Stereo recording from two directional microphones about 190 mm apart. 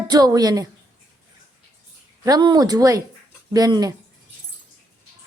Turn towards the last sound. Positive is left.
turn(degrees=-20)  # may be behind; listen again after turning